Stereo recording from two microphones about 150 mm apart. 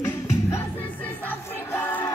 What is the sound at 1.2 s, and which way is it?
Music, 15° left (ahead or behind).